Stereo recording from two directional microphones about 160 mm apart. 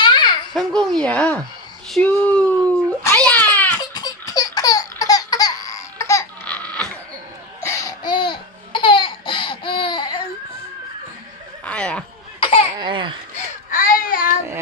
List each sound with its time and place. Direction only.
0.0 s a sound: 30° left (ahead or behind)
0.5 s speech: 5° left (ahead or behind)
2.1 s a sound: 5° left (ahead or behind)
3.9 s laughter: 25° left (ahead or behind)
6.5 s a sound: 5° left (ahead or behind)
7.6 s laughter: 20° left (ahead or behind)
11.6 s neigh: 5° left (ahead or behind)
12.4 s laughter: 35° left (ahead or behind)
12.8 s laughter: 30° right (ahead or behind)
13.7 s baby cry: 60° left (ahead or behind)